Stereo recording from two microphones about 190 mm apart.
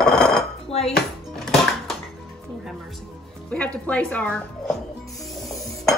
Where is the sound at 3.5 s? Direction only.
5° left (ahead or behind).